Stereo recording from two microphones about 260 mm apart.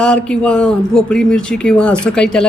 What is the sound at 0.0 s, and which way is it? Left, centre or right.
A woman's voice, centre.